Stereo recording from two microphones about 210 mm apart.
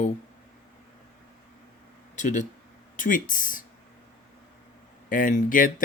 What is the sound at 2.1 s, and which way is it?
Speech, 35° left (ahead or behind).